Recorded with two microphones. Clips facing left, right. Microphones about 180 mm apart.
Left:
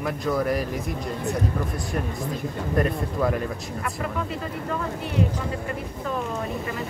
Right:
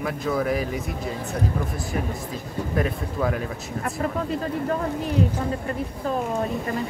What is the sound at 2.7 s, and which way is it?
Speech, centre (ahead or behind).